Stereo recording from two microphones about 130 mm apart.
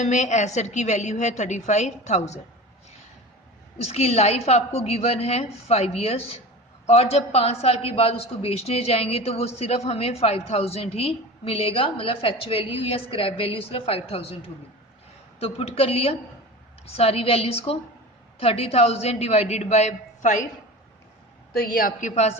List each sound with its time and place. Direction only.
0.0 s a woman's voice: 65° left (ahead or behind)
3.8 s a woman's voice: 55° left (ahead or behind)
21.6 s a woman's voice: 90° left; by 22.4 s 60° left (ahead or behind)